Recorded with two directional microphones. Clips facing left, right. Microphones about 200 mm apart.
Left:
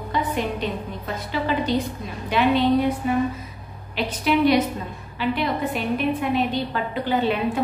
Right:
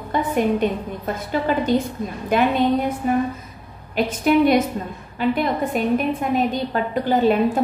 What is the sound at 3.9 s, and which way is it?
A woman's voice, 50° right (ahead or behind).